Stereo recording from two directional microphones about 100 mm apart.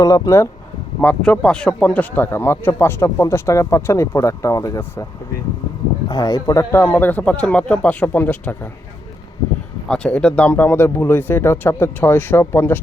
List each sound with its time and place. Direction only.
0.0 s speech: 35° left (ahead or behind)
1.0 s speech: 10° left (ahead or behind); by 5.0 s 35° left (ahead or behind)
6.1 s speech: 40° left (ahead or behind)
6.7 s speech: 25° left (ahead or behind)
9.9 s speech: 10° left (ahead or behind)